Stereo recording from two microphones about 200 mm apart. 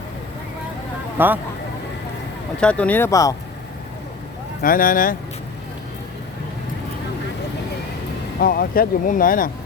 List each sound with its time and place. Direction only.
1.2 s speech: 10° right (ahead or behind)
2.6 s speech: 5° left (ahead or behind)
4.6 s speech: 45° left (ahead or behind)
8.4 s speech: 45° left (ahead or behind)